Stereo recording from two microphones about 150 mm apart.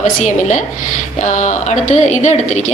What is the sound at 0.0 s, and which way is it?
A woman's voice, 55° left (ahead or behind).